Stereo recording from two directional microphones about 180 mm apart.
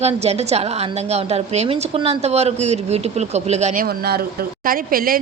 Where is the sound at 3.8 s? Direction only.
60° right (ahead or behind).